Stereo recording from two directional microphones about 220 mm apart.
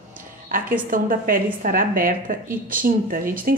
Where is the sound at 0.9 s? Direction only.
40° right (ahead or behind).